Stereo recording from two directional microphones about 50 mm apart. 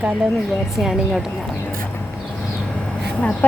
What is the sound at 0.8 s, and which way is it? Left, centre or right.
Speech, centre.